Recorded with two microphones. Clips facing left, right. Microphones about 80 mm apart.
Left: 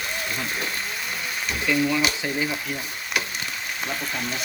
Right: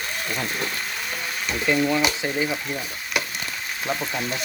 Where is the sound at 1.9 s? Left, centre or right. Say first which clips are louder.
Right 2 dB; centre.